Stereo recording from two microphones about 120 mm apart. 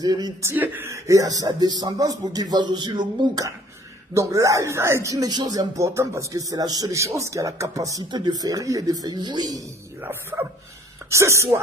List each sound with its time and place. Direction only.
0.0 s speech: 35° right (ahead or behind)
0.4 s speech: 20° right (ahead or behind); by 5.7 s 35° right (ahead or behind)
5.8 s speech: 25° right (ahead or behind)
10.3 s bow-wow: centre (ahead or behind)
11.1 s speech: 25° right (ahead or behind)